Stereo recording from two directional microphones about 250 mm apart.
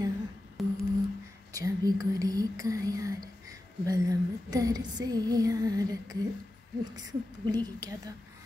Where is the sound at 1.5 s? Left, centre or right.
Centre.